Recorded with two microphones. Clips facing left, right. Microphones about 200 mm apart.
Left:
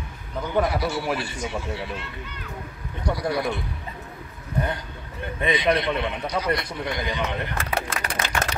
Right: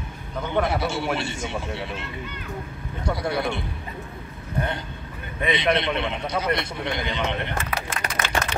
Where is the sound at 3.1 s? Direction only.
25° right (ahead or behind).